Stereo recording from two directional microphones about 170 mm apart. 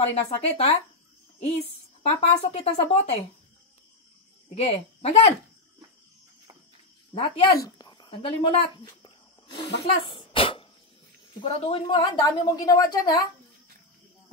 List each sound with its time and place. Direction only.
0.0 s speech: 40° left (ahead or behind)
2.0 s speech: 35° left (ahead or behind)
4.6 s speech: 35° left (ahead or behind)
7.2 s speech: 35° left (ahead or behind)
7.5 s a sound: 25° left (ahead or behind)
8.1 s speech: 35° left (ahead or behind)
10.0 s cough: 30° left (ahead or behind)
11.4 s a woman's voice: 35° left (ahead or behind)